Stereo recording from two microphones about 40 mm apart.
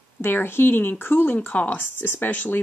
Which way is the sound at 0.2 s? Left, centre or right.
Left.